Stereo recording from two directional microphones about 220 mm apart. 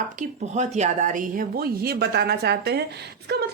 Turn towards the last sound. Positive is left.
turn(degrees=-50)  # may be behind; listen again after turning